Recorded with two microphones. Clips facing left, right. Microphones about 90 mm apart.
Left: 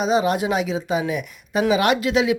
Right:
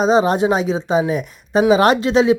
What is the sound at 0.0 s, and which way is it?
Speech, 35° right (ahead or behind).